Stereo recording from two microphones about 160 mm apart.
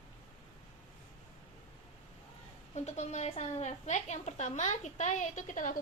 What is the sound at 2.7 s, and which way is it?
A woman's voice, 45° left (ahead or behind).